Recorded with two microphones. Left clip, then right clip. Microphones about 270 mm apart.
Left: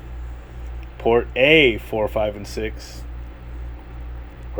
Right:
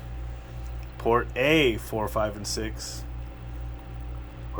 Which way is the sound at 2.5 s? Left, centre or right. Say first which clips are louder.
Left 5 dB; right.